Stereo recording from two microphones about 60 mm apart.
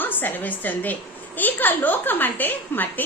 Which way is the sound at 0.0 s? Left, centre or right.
Left.